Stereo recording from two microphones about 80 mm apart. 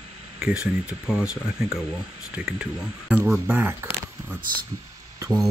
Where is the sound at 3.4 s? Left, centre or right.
Right.